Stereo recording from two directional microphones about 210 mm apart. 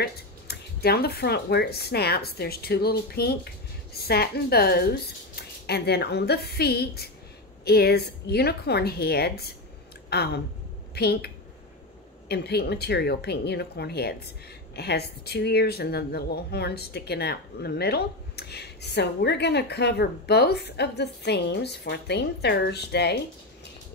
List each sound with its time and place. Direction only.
0.0 s speech: 50° left (ahead or behind)